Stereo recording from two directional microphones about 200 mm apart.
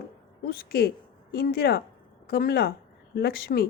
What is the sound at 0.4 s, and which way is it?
A woman's voice, 50° left (ahead or behind).